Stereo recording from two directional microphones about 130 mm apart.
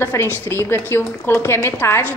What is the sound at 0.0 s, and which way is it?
A woman's voice, 20° left (ahead or behind).